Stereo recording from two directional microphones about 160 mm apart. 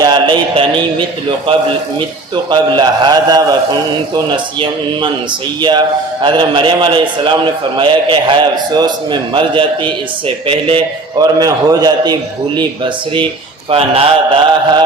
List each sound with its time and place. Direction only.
0.0 s a man's voice: 30° right (ahead or behind)
6.2 s a man's voice: 30° right (ahead or behind)
13.7 s a man's voice: 35° right (ahead or behind)